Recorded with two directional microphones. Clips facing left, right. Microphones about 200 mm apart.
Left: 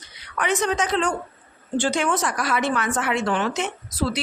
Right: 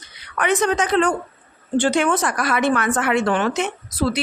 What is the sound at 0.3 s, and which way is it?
A woman's voice, 60° right (ahead or behind).